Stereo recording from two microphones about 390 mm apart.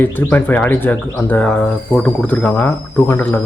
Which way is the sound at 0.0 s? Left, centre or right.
Centre.